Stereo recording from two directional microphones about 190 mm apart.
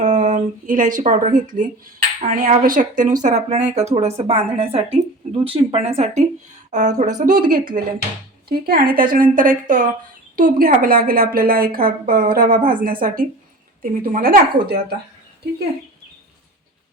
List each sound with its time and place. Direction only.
0.0 s a woman's voice: 40° right (ahead or behind)